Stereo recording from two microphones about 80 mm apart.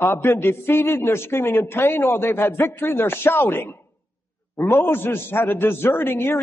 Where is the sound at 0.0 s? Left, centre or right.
Left.